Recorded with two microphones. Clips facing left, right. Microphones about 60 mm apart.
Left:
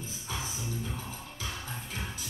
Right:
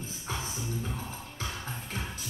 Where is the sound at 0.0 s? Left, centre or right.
Right.